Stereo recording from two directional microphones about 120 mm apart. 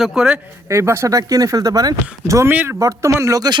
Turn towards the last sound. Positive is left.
turn(degrees=-30)  # may be behind; listen again after turning